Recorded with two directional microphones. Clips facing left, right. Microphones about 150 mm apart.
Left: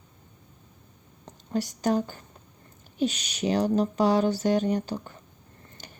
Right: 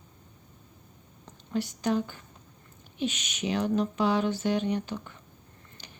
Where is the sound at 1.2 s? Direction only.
40° left (ahead or behind).